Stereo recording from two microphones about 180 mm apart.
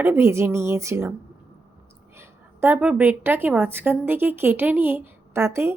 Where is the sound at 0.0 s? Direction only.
15° right (ahead or behind).